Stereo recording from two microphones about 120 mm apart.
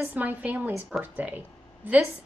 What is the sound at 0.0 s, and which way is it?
A woman's voice, 15° right (ahead or behind).